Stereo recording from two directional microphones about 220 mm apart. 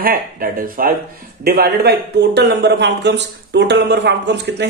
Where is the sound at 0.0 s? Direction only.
40° right (ahead or behind).